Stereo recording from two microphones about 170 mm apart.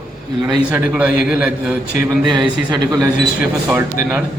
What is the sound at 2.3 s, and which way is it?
Speech, 25° right (ahead or behind).